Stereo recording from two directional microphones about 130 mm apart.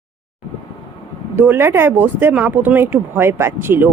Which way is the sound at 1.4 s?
15° right (ahead or behind).